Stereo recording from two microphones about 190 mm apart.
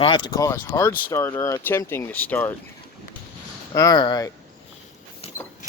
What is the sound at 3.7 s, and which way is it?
Speech, 20° left (ahead or behind).